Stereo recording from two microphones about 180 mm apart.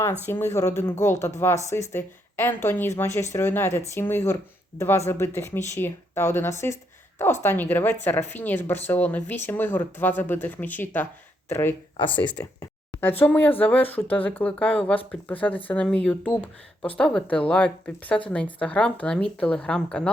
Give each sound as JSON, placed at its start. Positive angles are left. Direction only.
{"t": 0.3, "sound": "speech", "side_deg": 15}